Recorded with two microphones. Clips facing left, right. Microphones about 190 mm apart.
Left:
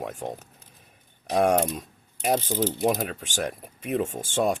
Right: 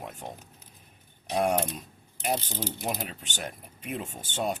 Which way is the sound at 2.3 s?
90° left.